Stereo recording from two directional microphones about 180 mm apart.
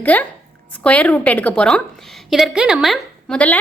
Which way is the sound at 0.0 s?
10° left (ahead or behind).